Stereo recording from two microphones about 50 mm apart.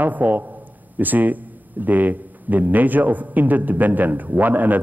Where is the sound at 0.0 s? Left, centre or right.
Right.